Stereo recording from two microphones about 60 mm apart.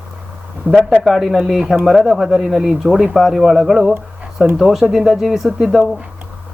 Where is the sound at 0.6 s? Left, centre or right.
Right.